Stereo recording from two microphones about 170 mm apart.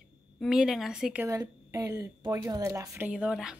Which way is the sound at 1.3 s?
20° right (ahead or behind).